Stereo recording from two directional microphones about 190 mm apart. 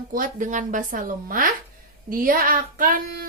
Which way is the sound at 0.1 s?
45° right (ahead or behind).